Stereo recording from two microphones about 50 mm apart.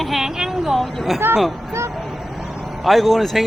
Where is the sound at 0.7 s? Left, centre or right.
Centre.